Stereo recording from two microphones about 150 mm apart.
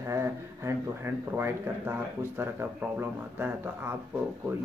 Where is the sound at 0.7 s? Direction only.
15° right (ahead or behind).